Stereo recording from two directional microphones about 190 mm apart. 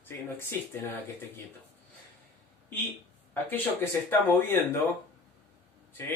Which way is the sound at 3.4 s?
10° left (ahead or behind).